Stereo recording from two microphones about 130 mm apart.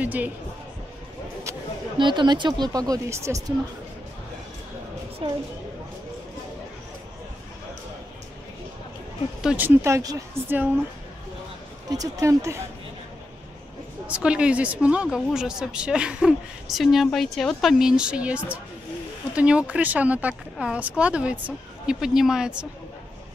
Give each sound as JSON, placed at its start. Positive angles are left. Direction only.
{"t": 0.0, "sound": "a woman's voice", "side_deg": -15}
{"t": 2.0, "sound": "speech", "side_deg": -35}
{"t": 9.4, "sound": "speech", "side_deg": -5}
{"t": 9.7, "sound": "speech", "side_deg": -20}
{"t": 11.9, "sound": "speech", "side_deg": -25}
{"t": 14.0, "sound": "a woman's voice", "side_deg": -10}